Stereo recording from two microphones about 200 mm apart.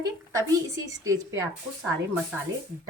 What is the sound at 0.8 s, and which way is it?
Speech, 15° right (ahead or behind).